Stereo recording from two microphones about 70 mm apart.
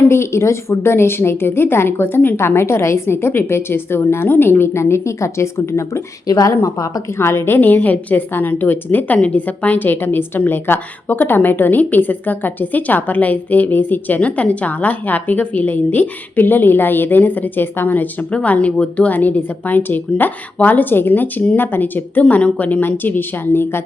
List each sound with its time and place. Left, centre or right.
0.1 s speech: left
6.2 s a woman's voice: left
6.5 s a woman's voice: left
7.2 s a woman's voice: left